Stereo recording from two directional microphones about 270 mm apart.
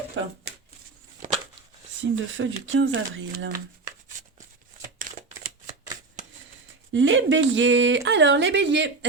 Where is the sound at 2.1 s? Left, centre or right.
Right.